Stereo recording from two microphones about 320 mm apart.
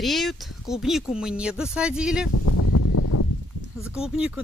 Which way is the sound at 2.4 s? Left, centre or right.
Left.